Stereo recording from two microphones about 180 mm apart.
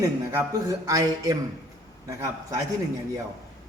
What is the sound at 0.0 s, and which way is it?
Chopping, 15° right (ahead or behind).